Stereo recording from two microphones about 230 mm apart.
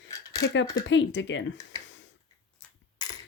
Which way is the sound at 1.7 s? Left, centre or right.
Centre.